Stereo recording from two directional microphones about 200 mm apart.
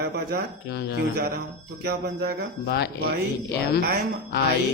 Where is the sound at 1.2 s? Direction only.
50° right (ahead or behind).